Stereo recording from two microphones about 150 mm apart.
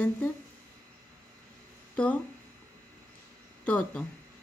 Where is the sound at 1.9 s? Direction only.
5° left (ahead or behind).